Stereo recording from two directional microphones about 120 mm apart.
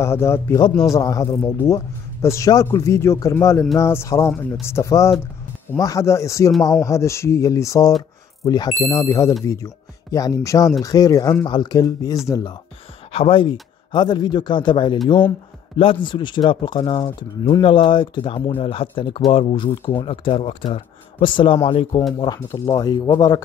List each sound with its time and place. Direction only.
0.0 s a man's voice: 20° left (ahead or behind)
0.6 s speech: 40° left (ahead or behind)
0.9 s a man's voice: 25° left (ahead or behind)
1.4 s a man's voice: 15° left (ahead or behind)
13.1 s speech: 50° left (ahead or behind); by 23.4 s 35° left (ahead or behind)